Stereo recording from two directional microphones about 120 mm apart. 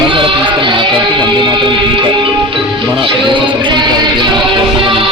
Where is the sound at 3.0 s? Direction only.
40° right (ahead or behind).